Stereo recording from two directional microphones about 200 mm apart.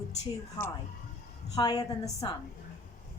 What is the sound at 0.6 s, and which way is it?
A woman's voice, 10° left (ahead or behind).